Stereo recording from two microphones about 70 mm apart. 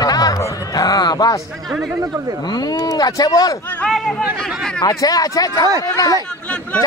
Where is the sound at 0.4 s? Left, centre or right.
Left.